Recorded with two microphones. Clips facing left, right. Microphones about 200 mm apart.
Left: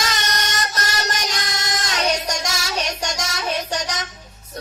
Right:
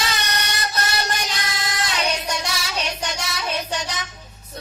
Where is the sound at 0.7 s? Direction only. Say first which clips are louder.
Right 1 dB; 40° left (ahead or behind).